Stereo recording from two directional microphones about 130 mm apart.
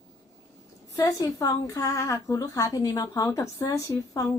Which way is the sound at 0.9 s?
25° left (ahead or behind).